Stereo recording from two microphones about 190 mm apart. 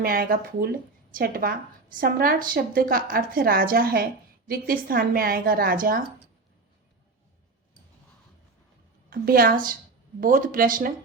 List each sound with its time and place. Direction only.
0.0 s a woman's voice: 50° right (ahead or behind)
9.0 s a woman's voice: 50° right (ahead or behind)